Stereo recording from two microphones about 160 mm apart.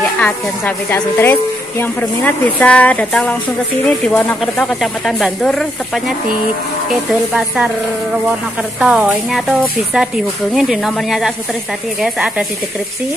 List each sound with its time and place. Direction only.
0.2 s a woman's voice: 10° left (ahead or behind)
8.7 s speech: 5° right (ahead or behind)